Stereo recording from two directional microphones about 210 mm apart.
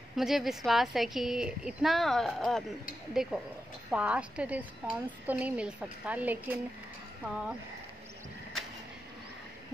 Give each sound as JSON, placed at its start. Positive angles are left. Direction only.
{"t": 0.1, "sound": "a woman's voice", "side_deg": 0}